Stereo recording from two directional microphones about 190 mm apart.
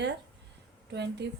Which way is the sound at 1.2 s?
65° right (ahead or behind).